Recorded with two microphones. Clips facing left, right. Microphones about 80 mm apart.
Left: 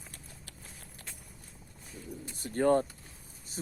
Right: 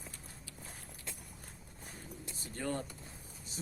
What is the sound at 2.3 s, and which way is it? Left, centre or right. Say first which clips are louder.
Speech: left 13 dB; left.